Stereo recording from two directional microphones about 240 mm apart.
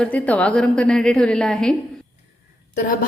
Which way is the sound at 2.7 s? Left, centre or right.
Left.